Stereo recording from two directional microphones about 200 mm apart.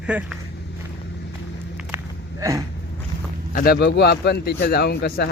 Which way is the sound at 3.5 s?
45° left (ahead or behind).